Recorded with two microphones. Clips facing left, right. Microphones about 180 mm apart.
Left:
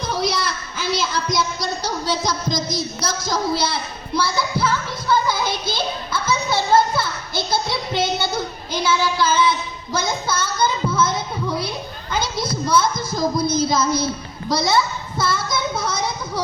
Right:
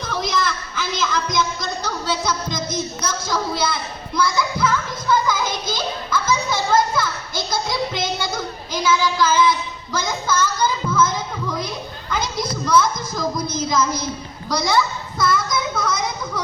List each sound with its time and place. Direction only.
0.0 s a sound: 40° left (ahead or behind)
14.5 s a child's voice: 25° left (ahead or behind)
15.2 s child singing: 30° left (ahead or behind)